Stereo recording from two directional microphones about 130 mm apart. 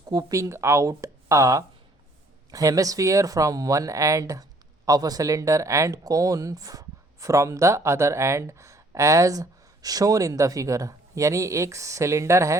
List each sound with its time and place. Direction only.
0.1 s speech: 30° right (ahead or behind)